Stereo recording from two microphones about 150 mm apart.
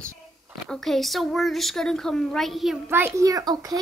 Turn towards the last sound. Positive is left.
turn(degrees=-25)  # may be behind; listen again after turning